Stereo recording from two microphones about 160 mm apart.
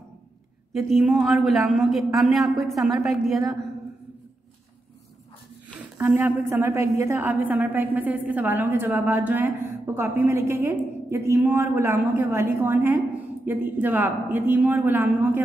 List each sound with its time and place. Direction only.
0.7 s a woman's voice: centre (ahead or behind)
5.9 s a woman's voice: 10° right (ahead or behind)